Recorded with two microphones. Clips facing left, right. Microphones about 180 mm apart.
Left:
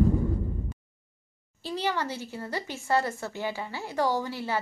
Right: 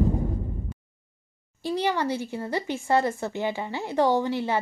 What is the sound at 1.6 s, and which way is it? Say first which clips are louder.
A child's voice: right 4 dB; 15° right (ahead or behind).